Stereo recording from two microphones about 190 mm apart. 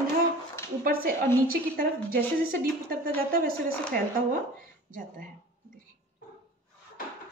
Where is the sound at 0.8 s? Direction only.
50° right (ahead or behind).